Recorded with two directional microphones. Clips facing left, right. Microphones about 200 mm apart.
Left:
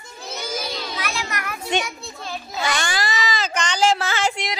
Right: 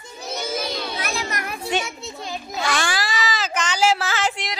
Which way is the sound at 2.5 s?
Centre (ahead or behind).